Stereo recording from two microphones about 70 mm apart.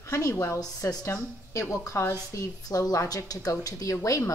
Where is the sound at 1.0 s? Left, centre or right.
Left.